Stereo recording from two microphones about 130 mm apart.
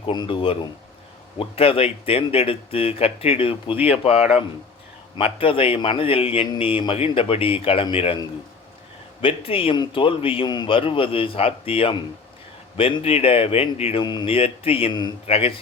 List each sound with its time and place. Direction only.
0.0 s a man's voice: 40° left (ahead or behind); by 4.4 s 55° left (ahead or behind)
5.1 s a man's voice: 45° left (ahead or behind)
9.2 s a man's voice: 45° left (ahead or behind)
14.0 s a man's voice: 35° left (ahead or behind)